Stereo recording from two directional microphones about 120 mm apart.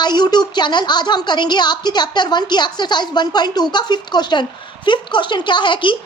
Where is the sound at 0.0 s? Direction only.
35° left (ahead or behind).